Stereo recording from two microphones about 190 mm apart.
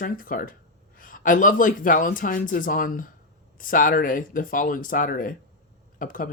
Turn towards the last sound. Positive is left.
turn(degrees=45)  # may be behind; listen again after turning